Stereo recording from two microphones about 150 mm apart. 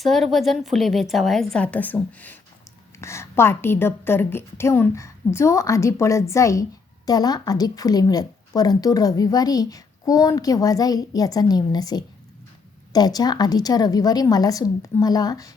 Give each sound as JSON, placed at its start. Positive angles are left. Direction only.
{"t": 0.0, "sound": "a woman's voice", "side_deg": 0}